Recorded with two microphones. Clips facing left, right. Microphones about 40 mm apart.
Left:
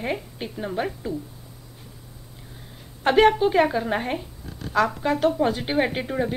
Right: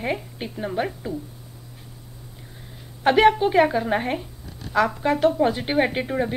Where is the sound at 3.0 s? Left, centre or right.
Centre.